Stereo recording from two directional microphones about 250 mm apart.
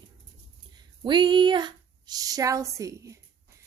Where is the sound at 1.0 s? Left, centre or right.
Centre.